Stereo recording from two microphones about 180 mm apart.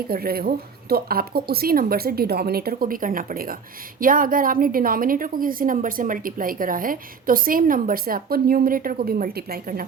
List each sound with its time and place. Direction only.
0.1 s a woman's voice: 55° right (ahead or behind)